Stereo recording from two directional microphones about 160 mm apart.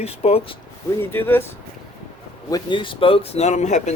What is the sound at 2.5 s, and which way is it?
Speech, 30° left (ahead or behind).